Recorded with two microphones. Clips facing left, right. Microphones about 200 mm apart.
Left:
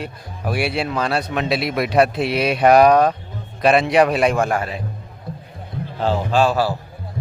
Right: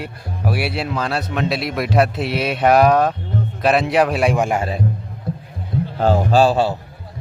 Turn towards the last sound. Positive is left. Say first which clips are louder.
# right 3 dB
turn(degrees=-25)  # may be behind; listen again after turning